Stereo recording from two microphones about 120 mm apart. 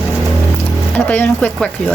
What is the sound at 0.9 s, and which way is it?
Speech, 15° left (ahead or behind).